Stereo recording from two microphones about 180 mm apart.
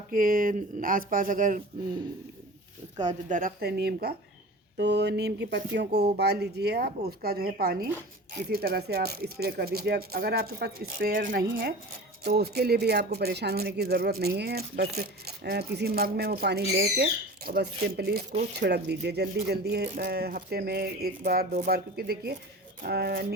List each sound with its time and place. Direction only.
0.1 s speech: 50° right (ahead or behind)
3.1 s speech: 45° right (ahead or behind)
11.4 s speech: 90° right
12.2 s speech: 60° right (ahead or behind)